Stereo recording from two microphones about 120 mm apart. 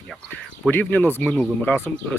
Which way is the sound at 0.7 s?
15° left (ahead or behind).